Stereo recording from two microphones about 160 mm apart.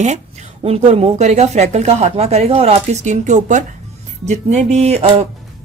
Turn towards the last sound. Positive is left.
turn(degrees=-40)  # may be behind; listen again after turning